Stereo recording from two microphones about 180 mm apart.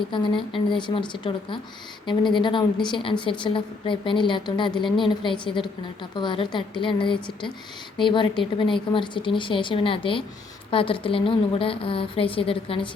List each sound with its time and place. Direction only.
0.1 s a woman's voice: 25° left (ahead or behind)